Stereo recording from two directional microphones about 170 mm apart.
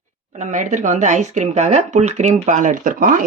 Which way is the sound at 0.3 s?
45° right (ahead or behind).